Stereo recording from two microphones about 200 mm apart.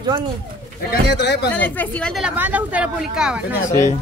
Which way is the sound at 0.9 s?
55° left (ahead or behind).